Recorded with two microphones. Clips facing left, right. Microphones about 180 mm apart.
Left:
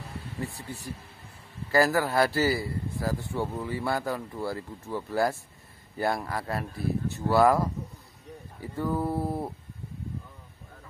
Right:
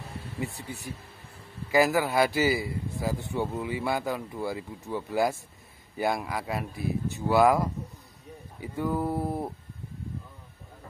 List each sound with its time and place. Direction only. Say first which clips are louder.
0.4 s speech: right 1 dB; 20° right (ahead or behind)
1.7 s speech: even; 15° right (ahead or behind)
3.3 s speech: right 1 dB; centre (ahead or behind)
3.6 s speech: even; 15° right (ahead or behind); by 9.3 s centre (ahead or behind)